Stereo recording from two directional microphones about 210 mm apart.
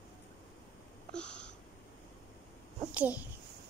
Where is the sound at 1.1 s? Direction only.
5° left (ahead or behind).